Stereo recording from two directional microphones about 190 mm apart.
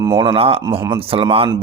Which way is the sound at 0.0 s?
25° right (ahead or behind).